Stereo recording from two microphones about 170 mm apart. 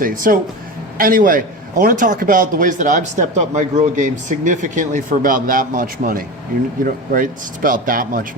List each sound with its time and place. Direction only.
0.0 s a man's voice: 55° right (ahead or behind)